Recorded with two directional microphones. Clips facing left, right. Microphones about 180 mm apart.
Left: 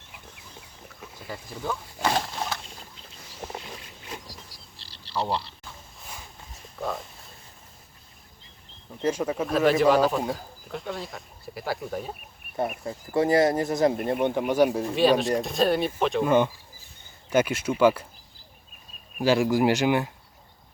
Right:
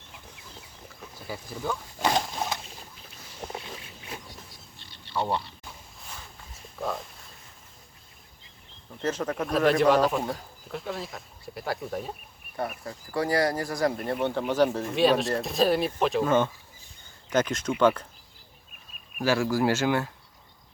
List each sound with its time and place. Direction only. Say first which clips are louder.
1.3 s speech: even; centre (ahead or behind)
2.0 s a sound: even; 15° right (ahead or behind)
5.1 s speech: even; 30° left (ahead or behind)
6.5 s dog: even; centre (ahead or behind)
9.0 s speech: left 3 dB; 10° left (ahead or behind)
12.8 s speech: left 7 dB; 25° left (ahead or behind)
14.9 s speech: left 1 dB; centre (ahead or behind)
16.2 s speech: left 2 dB; 15° left (ahead or behind)
19.1 s speech: left 3 dB; 20° left (ahead or behind)